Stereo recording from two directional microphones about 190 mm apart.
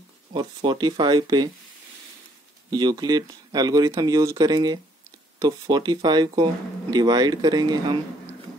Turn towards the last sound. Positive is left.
turn(degrees=-20)  # may be behind; listen again after turning